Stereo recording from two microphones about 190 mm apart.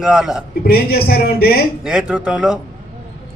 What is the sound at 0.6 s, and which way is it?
Speech, 55° left (ahead or behind).